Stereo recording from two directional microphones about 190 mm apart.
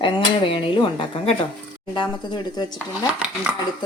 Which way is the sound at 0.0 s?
25° left (ahead or behind).